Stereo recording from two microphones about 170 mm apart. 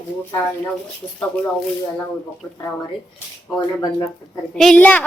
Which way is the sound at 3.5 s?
25° left (ahead or behind).